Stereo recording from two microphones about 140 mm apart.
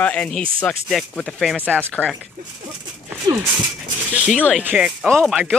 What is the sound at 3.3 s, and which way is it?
Speech, 30° right (ahead or behind).